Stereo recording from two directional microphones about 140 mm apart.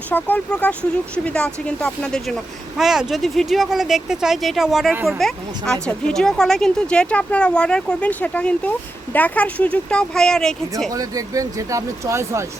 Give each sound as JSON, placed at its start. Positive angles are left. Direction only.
{"t": 0.1, "sound": "speech", "side_deg": 15}
{"t": 10.9, "sound": "speech", "side_deg": -25}